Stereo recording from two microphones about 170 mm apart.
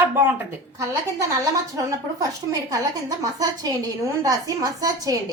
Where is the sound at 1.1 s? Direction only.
20° right (ahead or behind).